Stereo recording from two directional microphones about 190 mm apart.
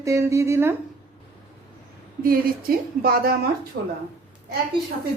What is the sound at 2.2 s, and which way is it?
Speech, 50° right (ahead or behind).